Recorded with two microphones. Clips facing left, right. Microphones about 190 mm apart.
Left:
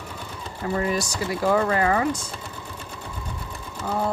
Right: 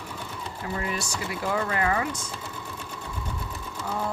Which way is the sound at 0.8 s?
40° left (ahead or behind).